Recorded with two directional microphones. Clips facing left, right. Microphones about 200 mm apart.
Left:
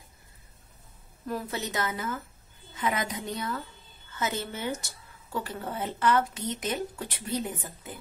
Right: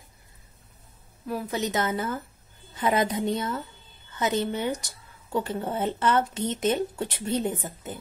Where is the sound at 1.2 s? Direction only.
10° right (ahead or behind).